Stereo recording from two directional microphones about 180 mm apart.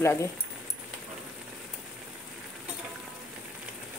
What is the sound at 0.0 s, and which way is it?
Speech, 15° left (ahead or behind).